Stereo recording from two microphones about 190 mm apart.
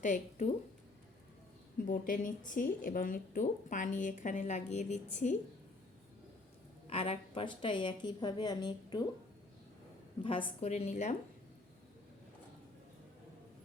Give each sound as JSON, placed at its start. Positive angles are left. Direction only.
{"t": 0.0, "sound": "a woman's voice", "side_deg": 40}
{"t": 1.9, "sound": "a woman's voice", "side_deg": 45}
{"t": 6.8, "sound": "a woman's voice", "side_deg": 30}
{"t": 10.2, "sound": "a woman's voice", "side_deg": 30}